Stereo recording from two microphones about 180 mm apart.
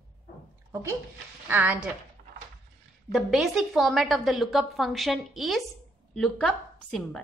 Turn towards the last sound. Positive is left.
turn(degrees=5)  # may be behind; listen again after turning